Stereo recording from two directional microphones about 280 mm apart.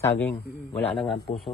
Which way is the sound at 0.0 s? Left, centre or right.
Centre.